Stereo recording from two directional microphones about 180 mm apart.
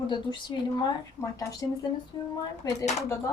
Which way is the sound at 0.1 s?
25° left (ahead or behind).